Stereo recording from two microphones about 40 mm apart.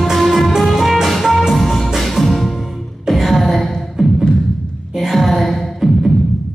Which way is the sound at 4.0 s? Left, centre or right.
Centre.